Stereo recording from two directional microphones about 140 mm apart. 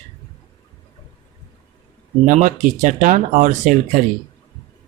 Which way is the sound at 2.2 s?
65° right (ahead or behind).